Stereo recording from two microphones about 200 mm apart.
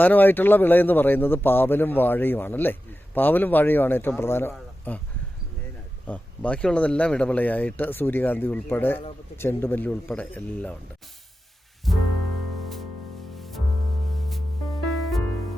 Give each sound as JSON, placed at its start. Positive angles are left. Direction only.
{"t": 0.0, "sound": "a man's voice", "side_deg": 10}
{"t": 6.1, "sound": "a man's voice", "side_deg": 5}
{"t": 11.9, "sound": "music", "side_deg": 0}